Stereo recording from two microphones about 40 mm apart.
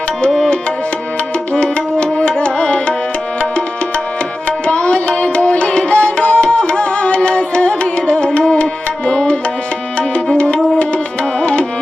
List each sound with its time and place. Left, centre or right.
0.3 s music: centre
4.4 s music: left
10.0 s tabla: left